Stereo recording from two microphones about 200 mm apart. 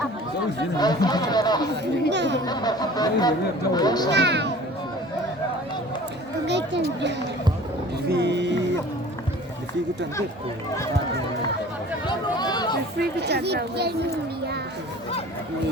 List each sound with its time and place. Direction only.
0.8 s speech: 20° left (ahead or behind)
1.7 s speech: 60° right (ahead or behind)
2.5 s speech: 20° left (ahead or behind)
4.1 s speech: 60° right (ahead or behind)
6.5 s speech: 60° right (ahead or behind)
12.0 s speech: 20° left (ahead or behind)
13.0 s speech: 55° right (ahead or behind)